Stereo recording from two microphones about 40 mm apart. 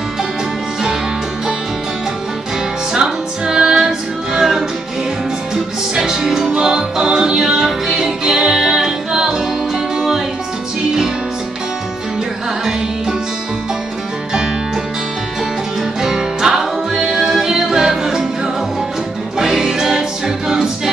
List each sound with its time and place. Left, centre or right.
2.9 s music: centre
16.0 s music: centre